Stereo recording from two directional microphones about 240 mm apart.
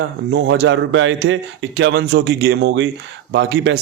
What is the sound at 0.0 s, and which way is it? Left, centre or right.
Speech, right.